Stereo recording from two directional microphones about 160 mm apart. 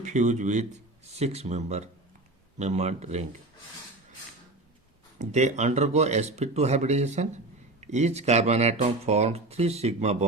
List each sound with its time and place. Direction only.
0.0 s speech: 45° right (ahead or behind)
5.2 s speech: 45° right (ahead or behind)